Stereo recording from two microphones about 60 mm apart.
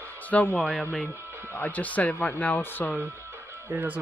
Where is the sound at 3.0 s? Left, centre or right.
Right.